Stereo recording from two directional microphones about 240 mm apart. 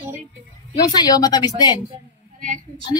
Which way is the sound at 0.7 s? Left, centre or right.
Centre.